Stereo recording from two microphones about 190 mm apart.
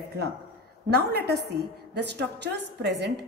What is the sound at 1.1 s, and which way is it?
A woman's voice, 60° right (ahead or behind).